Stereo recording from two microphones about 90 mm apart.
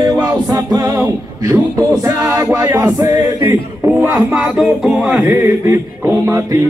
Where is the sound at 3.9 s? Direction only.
20° right (ahead or behind).